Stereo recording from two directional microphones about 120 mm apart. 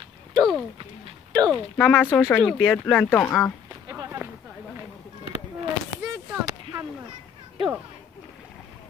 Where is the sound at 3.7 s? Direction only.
25° right (ahead or behind).